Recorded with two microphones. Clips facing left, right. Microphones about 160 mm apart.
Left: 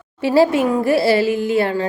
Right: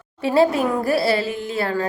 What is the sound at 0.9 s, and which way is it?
Speech, 25° left (ahead or behind).